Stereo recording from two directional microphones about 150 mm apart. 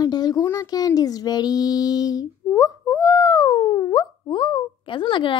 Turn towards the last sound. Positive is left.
turn(degrees=35)  # may be behind; listen again after turning